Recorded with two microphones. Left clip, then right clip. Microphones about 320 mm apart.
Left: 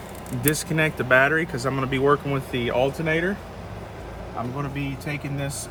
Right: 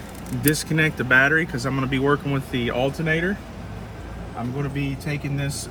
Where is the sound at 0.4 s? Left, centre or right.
Centre.